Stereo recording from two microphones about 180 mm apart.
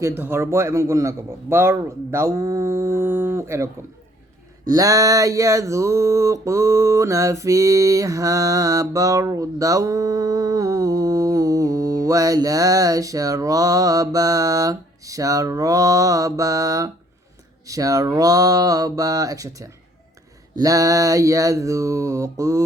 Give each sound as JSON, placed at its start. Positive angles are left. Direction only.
{"t": 0.0, "sound": "a man's voice", "side_deg": -15}
{"t": 4.6, "sound": "a sound", "side_deg": -20}
{"t": 20.6, "sound": "a man's voice", "side_deg": -20}